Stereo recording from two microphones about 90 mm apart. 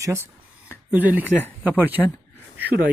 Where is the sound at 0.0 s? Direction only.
30° right (ahead or behind).